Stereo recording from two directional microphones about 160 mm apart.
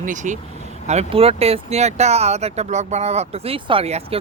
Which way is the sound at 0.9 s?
40° right (ahead or behind).